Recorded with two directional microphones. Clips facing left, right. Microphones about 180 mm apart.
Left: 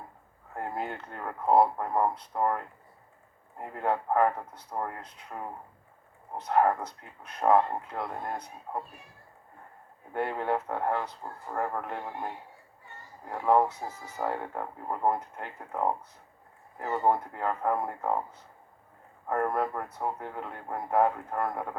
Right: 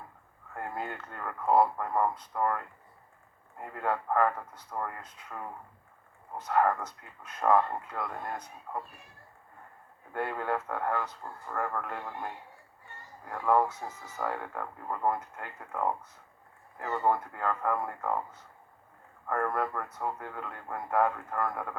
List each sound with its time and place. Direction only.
0.5 s speech: 30° left (ahead or behind)
7.5 s speech: 30° left (ahead or behind)
10.1 s speech: 25° left (ahead or behind)
19.3 s speech: 25° left (ahead or behind)